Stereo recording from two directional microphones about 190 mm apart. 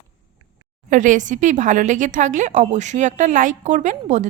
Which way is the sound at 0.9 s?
40° right (ahead or behind).